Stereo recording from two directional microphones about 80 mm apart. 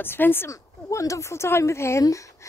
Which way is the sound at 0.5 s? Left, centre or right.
Left.